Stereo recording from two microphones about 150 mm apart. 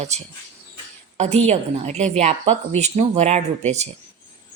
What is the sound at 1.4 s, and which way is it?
A woman's voice, 50° right (ahead or behind).